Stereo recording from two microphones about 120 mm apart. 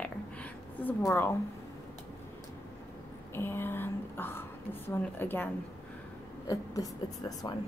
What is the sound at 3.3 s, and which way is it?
A woman's voice, 20° left (ahead or behind).